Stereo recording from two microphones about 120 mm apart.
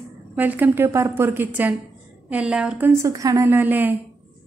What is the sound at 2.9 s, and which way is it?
A woman's voice, 25° right (ahead or behind).